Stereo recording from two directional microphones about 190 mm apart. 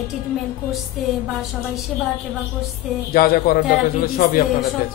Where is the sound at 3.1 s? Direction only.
50° left (ahead or behind).